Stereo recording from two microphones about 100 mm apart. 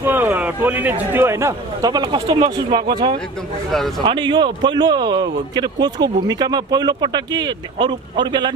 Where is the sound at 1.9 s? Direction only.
50° right (ahead or behind).